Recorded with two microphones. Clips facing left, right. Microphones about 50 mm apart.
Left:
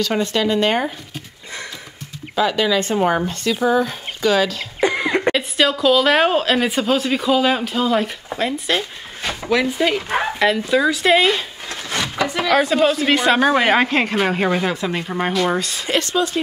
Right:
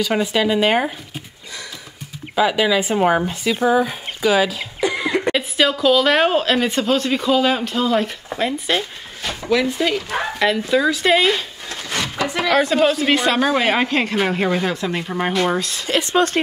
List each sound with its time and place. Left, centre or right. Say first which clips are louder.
0.0 s speech: right 1 dB; centre
2.3 s speech: right 1 dB; centre
4.7 s cough: left 2 dB; left
5.3 s a woman's voice: even; centre
9.3 s speech: even; centre
10.4 s a woman's voice: even; centre
11.7 s a sound: left 1 dB; left
12.3 s a woman's voice: even; centre
13.3 s a woman's voice: left 3 dB; centre
16.2 s speech: right 3 dB; right